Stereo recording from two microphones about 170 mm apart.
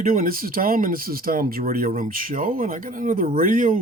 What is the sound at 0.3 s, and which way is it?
Speech, 55° right (ahead or behind).